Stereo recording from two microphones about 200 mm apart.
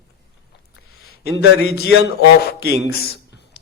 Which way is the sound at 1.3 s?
55° left (ahead or behind).